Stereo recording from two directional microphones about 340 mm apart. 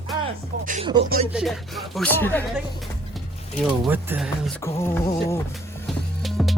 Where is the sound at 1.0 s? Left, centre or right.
Right.